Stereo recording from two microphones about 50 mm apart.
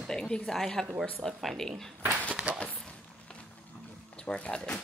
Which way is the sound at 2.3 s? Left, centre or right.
Right.